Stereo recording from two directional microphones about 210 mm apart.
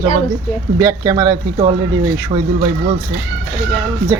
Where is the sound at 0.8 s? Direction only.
15° right (ahead or behind).